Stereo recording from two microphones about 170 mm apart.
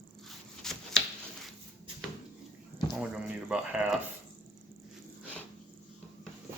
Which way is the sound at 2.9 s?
5° right (ahead or behind).